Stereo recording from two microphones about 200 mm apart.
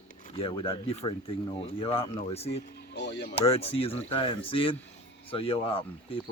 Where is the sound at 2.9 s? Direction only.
60° left (ahead or behind).